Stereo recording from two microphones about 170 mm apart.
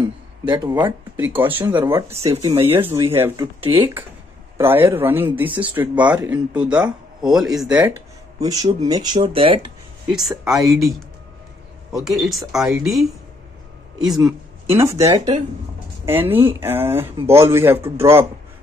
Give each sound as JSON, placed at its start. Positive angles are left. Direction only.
{"t": 0.5, "sound": "speech", "side_deg": -25}
{"t": 1.1, "sound": "speech", "side_deg": -10}
{"t": 2.3, "sound": "speech", "side_deg": -30}
{"t": 3.0, "sound": "speech", "side_deg": -15}
{"t": 4.6, "sound": "speech", "side_deg": -15}
{"t": 6.0, "sound": "speech", "side_deg": -20}
{"t": 6.3, "sound": "speech", "side_deg": -5}
{"t": 8.4, "sound": "speech", "side_deg": -20}
{"t": 10.3, "sound": "speech", "side_deg": -20}
{"t": 11.9, "sound": "speech", "side_deg": 0}
{"t": 14.7, "sound": "speech", "side_deg": -15}